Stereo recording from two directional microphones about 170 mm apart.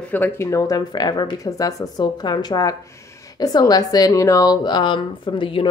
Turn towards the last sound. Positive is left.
turn(degrees=30)  # may be behind; listen again after turning